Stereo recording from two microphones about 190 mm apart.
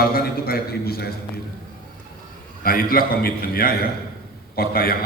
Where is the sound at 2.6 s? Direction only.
50° left (ahead or behind).